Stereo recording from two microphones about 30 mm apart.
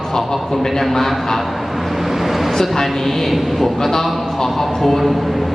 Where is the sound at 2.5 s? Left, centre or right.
Centre.